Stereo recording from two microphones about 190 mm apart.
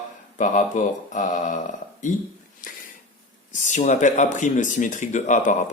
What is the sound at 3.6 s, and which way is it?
Speech, 40° left (ahead or behind).